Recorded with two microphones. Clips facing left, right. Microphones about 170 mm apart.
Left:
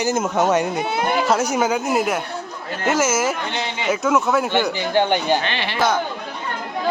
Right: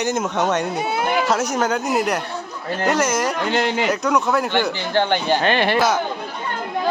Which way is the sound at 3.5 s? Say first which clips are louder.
Right 7 dB; 45° right (ahead or behind).